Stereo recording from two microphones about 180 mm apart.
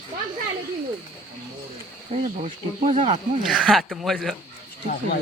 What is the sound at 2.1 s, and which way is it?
Speech, 35° right (ahead or behind).